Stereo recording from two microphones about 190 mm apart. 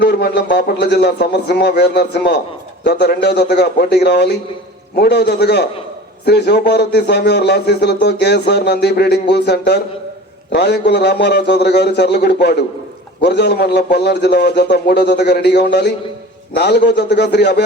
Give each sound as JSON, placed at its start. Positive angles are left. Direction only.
{"t": 0.0, "sound": "speech", "side_deg": 60}